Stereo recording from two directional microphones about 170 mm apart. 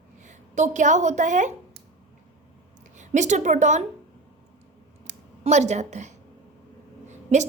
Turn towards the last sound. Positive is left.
turn(degrees=-45)  # may be behind; listen again after turning